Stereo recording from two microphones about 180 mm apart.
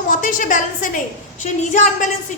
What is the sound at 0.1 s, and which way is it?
A woman's voice, 45° left (ahead or behind).